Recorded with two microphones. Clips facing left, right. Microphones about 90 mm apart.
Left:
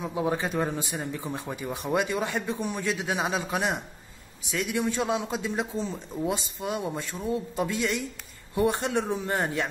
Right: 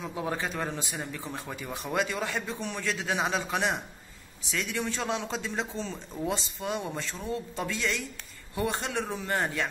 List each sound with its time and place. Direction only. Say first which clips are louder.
0.0 s speech: left 4 dB; 15° left (ahead or behind)
4.5 s a man's voice: left 4 dB; 20° left (ahead or behind)